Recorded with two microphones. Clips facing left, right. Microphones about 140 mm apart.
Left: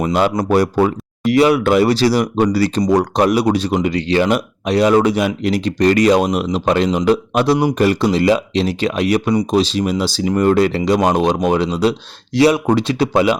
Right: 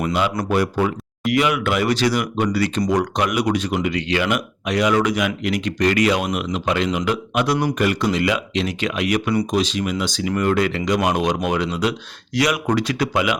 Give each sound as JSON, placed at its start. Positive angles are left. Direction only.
{"t": 0.0, "sound": "speech", "side_deg": 40}